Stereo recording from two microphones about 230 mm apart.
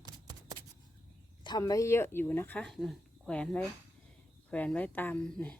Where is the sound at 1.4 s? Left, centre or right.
Centre.